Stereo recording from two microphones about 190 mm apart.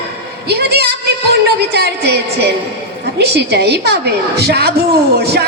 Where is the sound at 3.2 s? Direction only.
60° right (ahead or behind).